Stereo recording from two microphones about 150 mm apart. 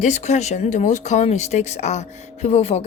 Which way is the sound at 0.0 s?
50° left (ahead or behind).